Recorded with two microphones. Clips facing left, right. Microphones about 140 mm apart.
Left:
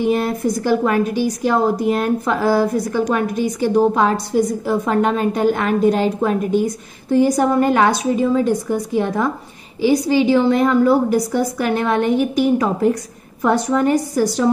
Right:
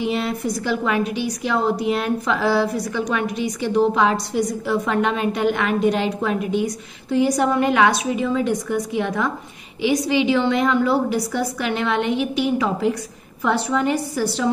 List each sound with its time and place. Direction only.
0.0 s a woman's voice: 45° left (ahead or behind)